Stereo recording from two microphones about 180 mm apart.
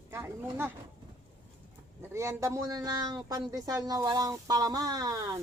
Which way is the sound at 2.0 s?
15° right (ahead or behind).